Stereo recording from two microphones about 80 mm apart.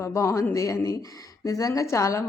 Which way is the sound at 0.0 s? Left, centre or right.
Left.